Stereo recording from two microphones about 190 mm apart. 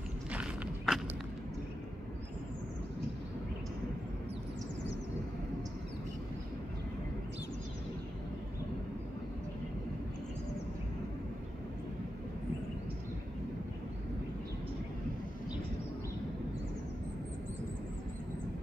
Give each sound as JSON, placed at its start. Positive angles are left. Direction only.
{"t": 0.3, "sound": "walk", "side_deg": -5}